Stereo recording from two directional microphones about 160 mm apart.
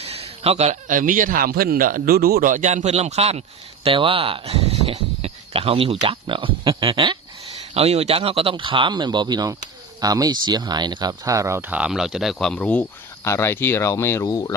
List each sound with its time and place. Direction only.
0.0 s a man's voice: 40° right (ahead or behind); by 14.5 s 20° left (ahead or behind)